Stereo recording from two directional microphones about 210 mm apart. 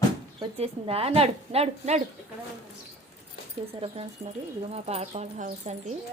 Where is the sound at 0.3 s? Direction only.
30° right (ahead or behind).